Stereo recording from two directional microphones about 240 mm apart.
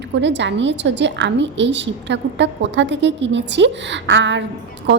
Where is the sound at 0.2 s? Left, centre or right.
Right.